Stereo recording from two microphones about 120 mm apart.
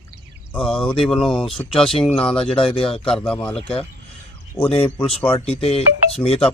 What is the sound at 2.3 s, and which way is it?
Speech, 50° left (ahead or behind).